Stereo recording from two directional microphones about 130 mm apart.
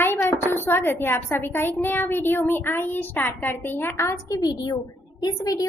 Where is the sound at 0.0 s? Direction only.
15° left (ahead or behind).